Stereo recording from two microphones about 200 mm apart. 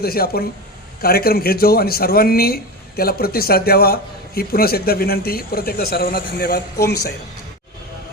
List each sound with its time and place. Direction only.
0.0 s a man's voice: 50° left (ahead or behind)